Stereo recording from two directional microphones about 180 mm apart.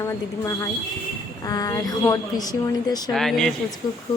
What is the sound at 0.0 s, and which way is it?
Speech, 15° left (ahead or behind).